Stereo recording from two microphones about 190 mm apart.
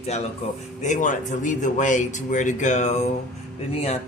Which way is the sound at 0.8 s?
40° left (ahead or behind).